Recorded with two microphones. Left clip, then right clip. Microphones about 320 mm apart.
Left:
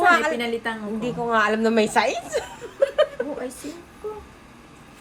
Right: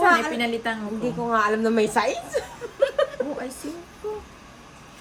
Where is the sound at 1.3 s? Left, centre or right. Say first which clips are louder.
Left 2 dB; centre.